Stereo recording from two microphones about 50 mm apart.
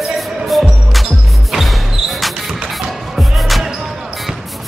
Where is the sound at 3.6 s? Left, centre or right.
Centre.